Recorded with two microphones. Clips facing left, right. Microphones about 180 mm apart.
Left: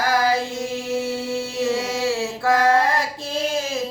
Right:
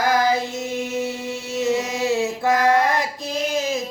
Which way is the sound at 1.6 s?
20° right (ahead or behind).